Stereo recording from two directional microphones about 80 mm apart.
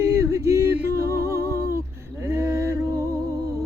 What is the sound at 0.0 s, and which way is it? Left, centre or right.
Music, right.